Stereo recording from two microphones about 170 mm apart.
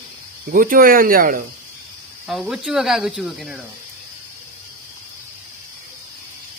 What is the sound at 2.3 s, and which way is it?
Speech, centre (ahead or behind).